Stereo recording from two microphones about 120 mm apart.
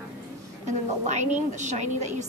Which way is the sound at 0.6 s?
75° right (ahead or behind).